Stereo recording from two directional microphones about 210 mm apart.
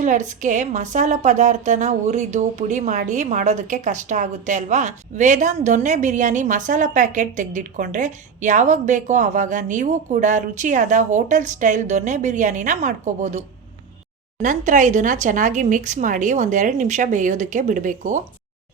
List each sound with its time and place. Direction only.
0.0 s a woman's voice: 35° right (ahead or behind)
14.4 s a woman's voice: 35° right (ahead or behind)